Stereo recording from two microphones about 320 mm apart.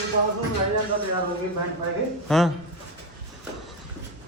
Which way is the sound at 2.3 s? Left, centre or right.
Centre.